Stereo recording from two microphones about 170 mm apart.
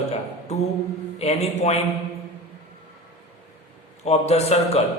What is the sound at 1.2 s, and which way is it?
Speech, 40° left (ahead or behind).